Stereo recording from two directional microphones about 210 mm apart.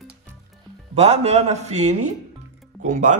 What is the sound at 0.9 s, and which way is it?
Speech, 30° right (ahead or behind).